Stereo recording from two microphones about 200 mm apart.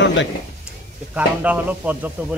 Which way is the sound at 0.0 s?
65° left (ahead or behind).